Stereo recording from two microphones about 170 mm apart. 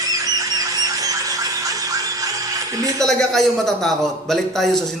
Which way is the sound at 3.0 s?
Centre (ahead or behind).